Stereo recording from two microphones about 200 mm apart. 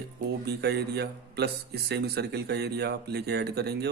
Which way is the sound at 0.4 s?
55° right (ahead or behind).